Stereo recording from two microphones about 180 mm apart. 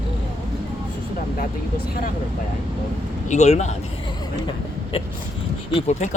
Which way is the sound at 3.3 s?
40° left (ahead or behind).